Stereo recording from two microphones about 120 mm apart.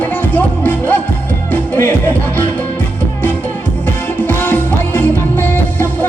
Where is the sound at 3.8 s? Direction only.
15° left (ahead or behind).